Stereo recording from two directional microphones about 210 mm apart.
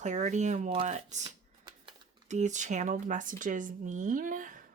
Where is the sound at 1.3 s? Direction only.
20° right (ahead or behind).